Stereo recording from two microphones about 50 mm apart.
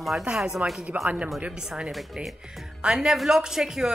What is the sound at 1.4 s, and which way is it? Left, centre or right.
Speech, centre.